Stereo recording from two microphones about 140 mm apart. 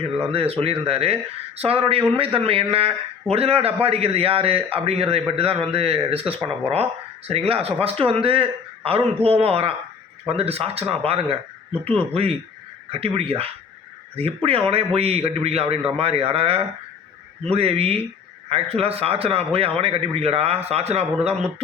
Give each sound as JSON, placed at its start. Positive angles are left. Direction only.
{"t": 0.3, "sound": "a man's voice", "side_deg": -45}